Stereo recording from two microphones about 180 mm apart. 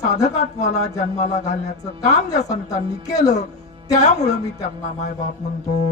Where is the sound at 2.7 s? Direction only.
20° left (ahead or behind).